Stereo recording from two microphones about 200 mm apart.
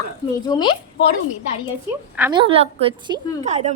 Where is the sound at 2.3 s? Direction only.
25° right (ahead or behind).